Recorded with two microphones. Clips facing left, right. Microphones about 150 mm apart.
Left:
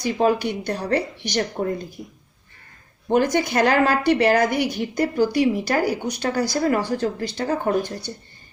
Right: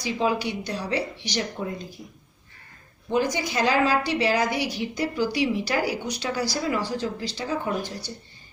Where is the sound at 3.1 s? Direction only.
60° left (ahead or behind).